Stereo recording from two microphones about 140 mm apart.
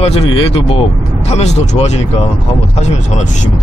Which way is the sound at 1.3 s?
50° left (ahead or behind).